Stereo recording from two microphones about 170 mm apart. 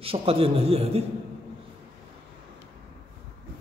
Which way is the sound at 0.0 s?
35° right (ahead or behind).